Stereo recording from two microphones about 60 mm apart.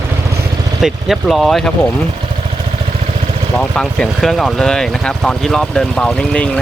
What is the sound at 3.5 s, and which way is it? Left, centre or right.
Speech, centre.